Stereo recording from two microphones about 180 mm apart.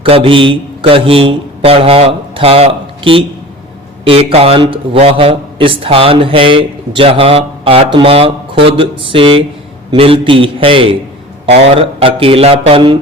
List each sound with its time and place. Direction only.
0.0 s a man's voice: 30° right (ahead or behind)